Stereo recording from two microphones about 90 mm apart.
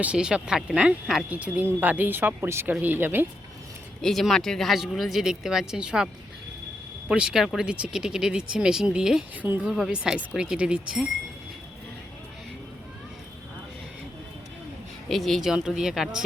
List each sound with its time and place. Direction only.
0.0 s speech: 10° right (ahead or behind)
4.0 s speech: 5° left (ahead or behind)
7.1 s speech: 10° right (ahead or behind)
15.1 s speech: centre (ahead or behind)